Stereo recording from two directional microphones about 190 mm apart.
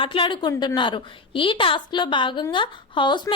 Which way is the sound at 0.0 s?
25° left (ahead or behind).